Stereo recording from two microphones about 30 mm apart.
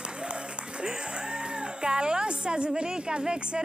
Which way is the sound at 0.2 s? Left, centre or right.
Right.